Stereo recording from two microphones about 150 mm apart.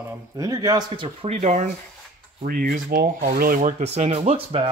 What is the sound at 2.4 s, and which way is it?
Speech, 70° right (ahead or behind).